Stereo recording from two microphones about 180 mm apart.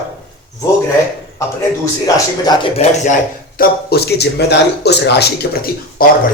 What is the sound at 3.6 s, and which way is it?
Speech, 65° left (ahead or behind).